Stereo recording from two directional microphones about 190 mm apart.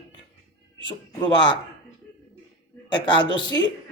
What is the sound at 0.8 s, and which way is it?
Speech, 25° left (ahead or behind).